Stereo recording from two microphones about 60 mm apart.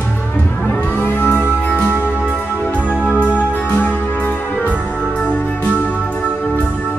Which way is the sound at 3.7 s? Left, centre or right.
Left.